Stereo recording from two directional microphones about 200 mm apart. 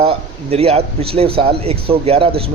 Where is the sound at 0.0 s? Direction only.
30° right (ahead or behind).